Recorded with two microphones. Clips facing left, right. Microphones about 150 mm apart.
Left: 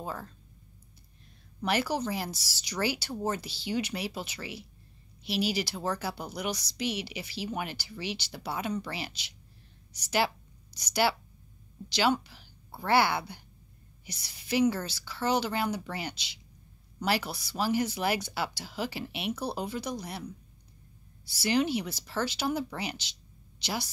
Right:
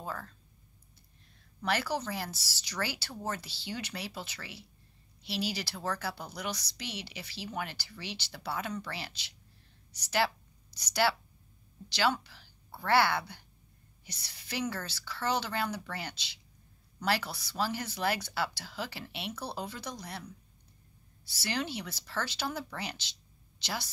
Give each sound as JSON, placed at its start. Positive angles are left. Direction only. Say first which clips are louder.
{"t": 0.0, "sound": "speech", "louder": "left 2 dB", "side_deg": 15}
{"t": 1.6, "sound": "a woman's voice", "louder": "left 3 dB", "side_deg": 15}
{"t": 21.3, "sound": "a woman's voice", "louder": "left 8 dB", "side_deg": 15}